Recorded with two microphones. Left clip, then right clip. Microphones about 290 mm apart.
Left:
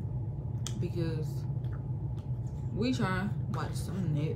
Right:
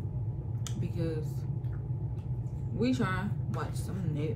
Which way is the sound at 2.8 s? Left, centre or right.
Centre.